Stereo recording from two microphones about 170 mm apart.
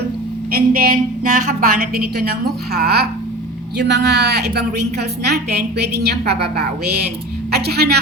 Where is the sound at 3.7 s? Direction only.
80° right.